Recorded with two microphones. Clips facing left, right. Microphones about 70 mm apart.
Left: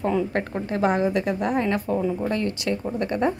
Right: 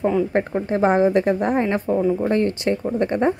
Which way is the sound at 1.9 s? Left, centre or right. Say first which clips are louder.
Right 8 dB; centre.